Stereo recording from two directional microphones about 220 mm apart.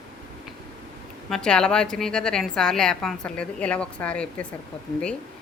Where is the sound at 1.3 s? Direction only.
5° left (ahead or behind).